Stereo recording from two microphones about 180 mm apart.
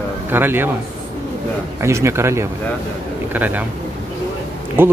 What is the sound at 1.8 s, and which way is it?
Speech, 15° right (ahead or behind).